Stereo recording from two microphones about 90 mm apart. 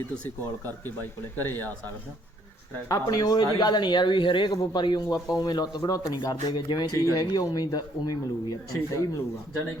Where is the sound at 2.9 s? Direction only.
40° left (ahead or behind).